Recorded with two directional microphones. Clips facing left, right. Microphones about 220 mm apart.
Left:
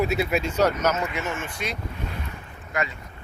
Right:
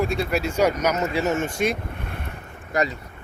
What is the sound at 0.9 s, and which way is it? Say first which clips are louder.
Speech: right 6 dB; 35° right (ahead or behind).